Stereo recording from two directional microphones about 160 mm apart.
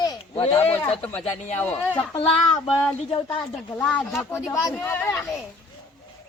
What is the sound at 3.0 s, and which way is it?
Speech, 35° left (ahead or behind).